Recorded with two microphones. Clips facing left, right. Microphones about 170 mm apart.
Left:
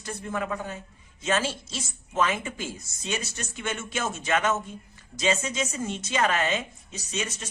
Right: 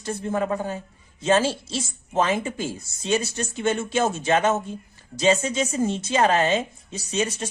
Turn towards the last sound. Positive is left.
turn(degrees=-35)  # may be behind; listen again after turning